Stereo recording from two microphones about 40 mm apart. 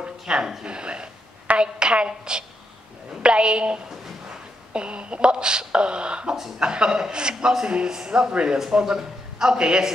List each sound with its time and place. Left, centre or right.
0.3 s a man's voice: centre